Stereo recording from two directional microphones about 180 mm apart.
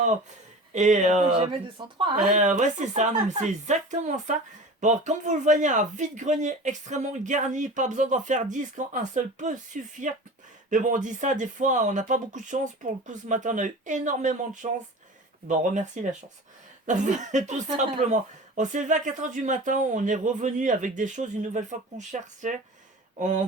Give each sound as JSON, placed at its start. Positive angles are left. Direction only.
{"t": 0.7, "sound": "speech", "side_deg": -40}
{"t": 1.8, "sound": "speech", "side_deg": -25}
{"t": 2.1, "sound": "speech", "side_deg": -45}